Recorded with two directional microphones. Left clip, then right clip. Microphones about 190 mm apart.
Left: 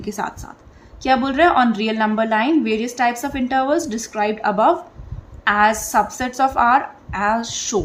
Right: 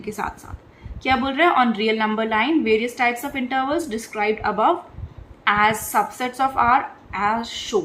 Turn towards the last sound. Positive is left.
turn(degrees=40)  # may be behind; listen again after turning